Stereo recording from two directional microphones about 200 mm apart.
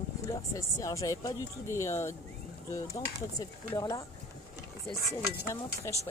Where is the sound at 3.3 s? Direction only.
15° left (ahead or behind).